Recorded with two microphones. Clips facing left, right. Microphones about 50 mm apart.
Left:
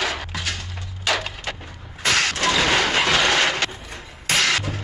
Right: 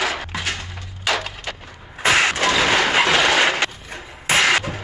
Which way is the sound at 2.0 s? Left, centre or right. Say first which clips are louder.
Right 4 dB; right.